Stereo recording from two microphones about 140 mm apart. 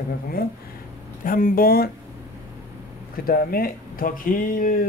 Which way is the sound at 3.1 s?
90° left.